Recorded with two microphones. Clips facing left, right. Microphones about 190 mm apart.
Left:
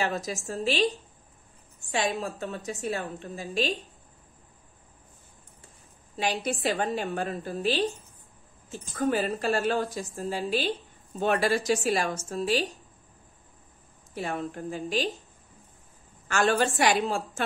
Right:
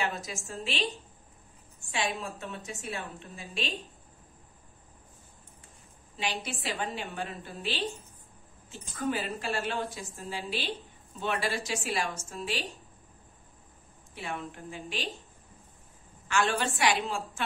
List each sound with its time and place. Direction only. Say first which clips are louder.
0.0 s a woman's voice: left 5 dB; 40° left (ahead or behind)
1.9 s a woman's voice: left 5 dB; 40° left (ahead or behind)
6.1 s a woman's voice: left 6 dB; 45° left (ahead or behind)
9.0 s a woman's voice: left 6 dB; 40° left (ahead or behind)
14.1 s a woman's voice: left 6 dB; 40° left (ahead or behind)
16.3 s a woman's voice: left 4 dB; 40° left (ahead or behind)